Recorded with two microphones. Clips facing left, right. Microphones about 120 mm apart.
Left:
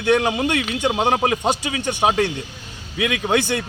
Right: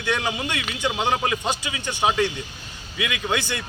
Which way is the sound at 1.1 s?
40° left (ahead or behind).